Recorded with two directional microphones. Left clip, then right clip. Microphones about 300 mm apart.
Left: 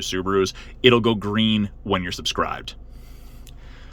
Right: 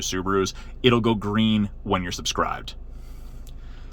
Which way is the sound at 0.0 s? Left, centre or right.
Centre.